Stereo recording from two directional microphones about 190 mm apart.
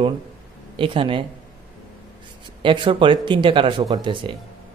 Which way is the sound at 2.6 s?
25° right (ahead or behind).